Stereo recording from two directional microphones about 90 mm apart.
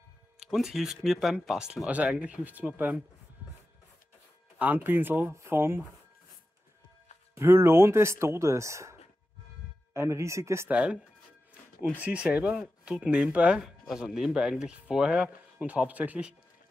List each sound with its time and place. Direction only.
0.4 s speech: 5° right (ahead or behind)
4.6 s speech: 20° right (ahead or behind)
7.3 s speech: 30° right (ahead or behind)
9.9 s speech: 30° right (ahead or behind)
10.7 s speech: 15° right (ahead or behind)
12.0 s speech: 15° right (ahead or behind)